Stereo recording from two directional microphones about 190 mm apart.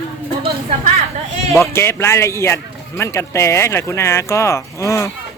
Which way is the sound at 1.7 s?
15° left (ahead or behind).